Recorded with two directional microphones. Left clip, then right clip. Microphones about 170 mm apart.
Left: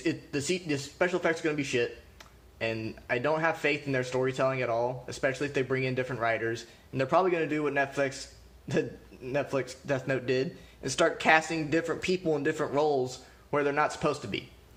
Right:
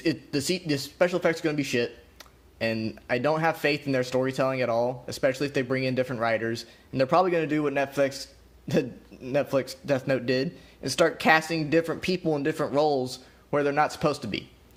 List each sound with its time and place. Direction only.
0.0 s speech: 45° right (ahead or behind)